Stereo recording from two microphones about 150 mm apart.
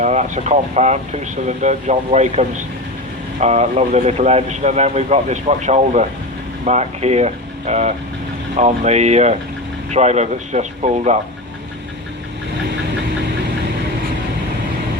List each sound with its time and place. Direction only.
0.0 s speech: 50° right (ahead or behind)